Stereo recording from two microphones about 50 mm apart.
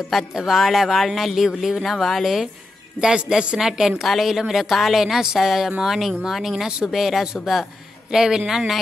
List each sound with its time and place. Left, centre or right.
0.3 s speech: centre
3.0 s speech: centre